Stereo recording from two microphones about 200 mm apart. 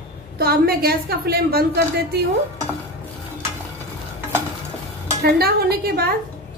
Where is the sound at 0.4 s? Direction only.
50° right (ahead or behind).